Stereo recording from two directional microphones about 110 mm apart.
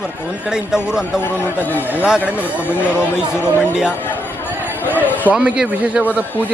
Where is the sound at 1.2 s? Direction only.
20° left (ahead or behind).